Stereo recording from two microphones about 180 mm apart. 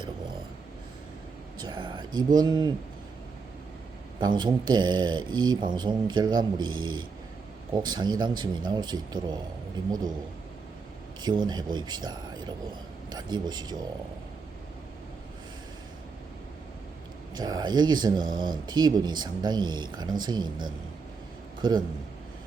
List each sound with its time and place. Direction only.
1.5 s speech: 25° right (ahead or behind)
4.2 s speech: 25° right (ahead or behind)
11.2 s speech: 25° right (ahead or behind)
17.3 s a man's voice: 25° right (ahead or behind)